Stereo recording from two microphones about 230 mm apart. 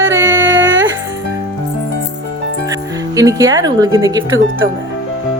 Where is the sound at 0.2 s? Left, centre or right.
Right.